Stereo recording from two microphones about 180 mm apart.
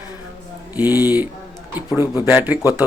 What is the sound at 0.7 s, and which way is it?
Speech, 10° right (ahead or behind).